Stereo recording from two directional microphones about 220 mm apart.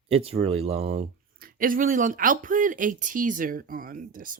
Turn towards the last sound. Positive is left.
turn(degrees=-40)  # may be behind; listen again after turning